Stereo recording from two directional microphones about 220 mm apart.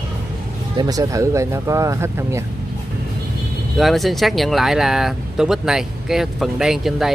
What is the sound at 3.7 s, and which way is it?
Speech, centre (ahead or behind).